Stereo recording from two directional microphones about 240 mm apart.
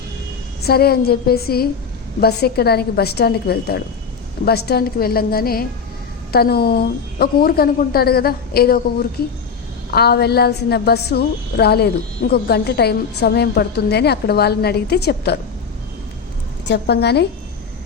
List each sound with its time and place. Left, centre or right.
0.6 s a woman's voice: left
16.6 s a woman's voice: left